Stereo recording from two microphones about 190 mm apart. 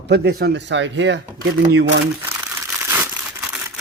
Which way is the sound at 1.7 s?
90° right.